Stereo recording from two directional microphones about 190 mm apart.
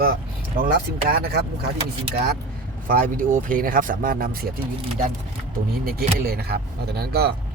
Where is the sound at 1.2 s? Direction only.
55° right (ahead or behind).